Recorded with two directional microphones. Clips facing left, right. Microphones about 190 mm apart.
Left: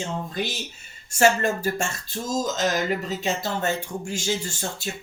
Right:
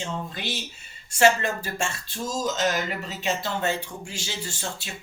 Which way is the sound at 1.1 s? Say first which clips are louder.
Even; 45° left (ahead or behind).